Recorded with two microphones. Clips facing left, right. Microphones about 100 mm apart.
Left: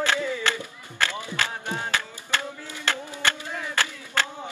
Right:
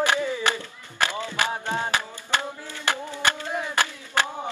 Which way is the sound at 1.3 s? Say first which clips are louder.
Right 4 dB; 20° right (ahead or behind).